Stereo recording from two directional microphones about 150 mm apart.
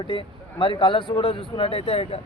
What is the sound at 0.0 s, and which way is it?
Speech, 35° left (ahead or behind).